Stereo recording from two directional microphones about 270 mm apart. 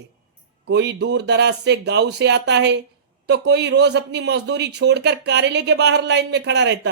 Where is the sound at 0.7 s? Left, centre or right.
Right.